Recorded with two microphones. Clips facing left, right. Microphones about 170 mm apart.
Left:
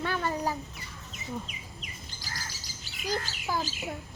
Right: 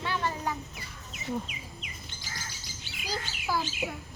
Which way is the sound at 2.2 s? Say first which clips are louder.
Left 2 dB; 40° left (ahead or behind).